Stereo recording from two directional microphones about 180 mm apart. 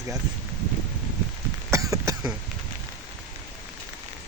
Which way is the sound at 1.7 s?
15° right (ahead or behind).